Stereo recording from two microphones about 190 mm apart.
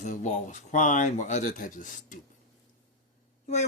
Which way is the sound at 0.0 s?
40° left (ahead or behind).